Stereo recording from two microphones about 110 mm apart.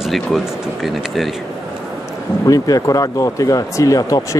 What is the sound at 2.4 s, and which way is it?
Speech, 35° left (ahead or behind).